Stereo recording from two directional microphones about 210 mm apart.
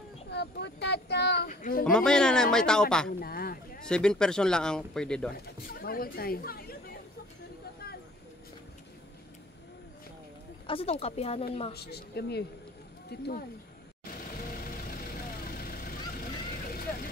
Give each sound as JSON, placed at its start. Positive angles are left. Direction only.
{"t": 0.3, "sound": "speech", "side_deg": 55}
{"t": 1.5, "sound": "speech", "side_deg": 40}
{"t": 1.9, "sound": "speech", "side_deg": 5}
{"t": 3.2, "sound": "speech", "side_deg": 45}
{"t": 3.8, "sound": "speech", "side_deg": 5}
{"t": 5.3, "sound": "speech", "side_deg": 45}
{"t": 10.7, "sound": "speech", "side_deg": 30}
{"t": 11.7, "sound": "speech", "side_deg": 50}
{"t": 14.6, "sound": "vehicle", "side_deg": 45}